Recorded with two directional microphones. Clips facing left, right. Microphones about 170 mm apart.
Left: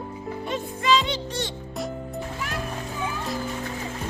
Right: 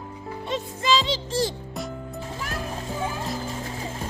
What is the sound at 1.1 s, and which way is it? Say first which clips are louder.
Speech: right 4 dB; 90° right.